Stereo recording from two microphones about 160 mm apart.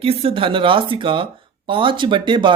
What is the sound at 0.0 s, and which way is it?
Speech, 35° right (ahead or behind).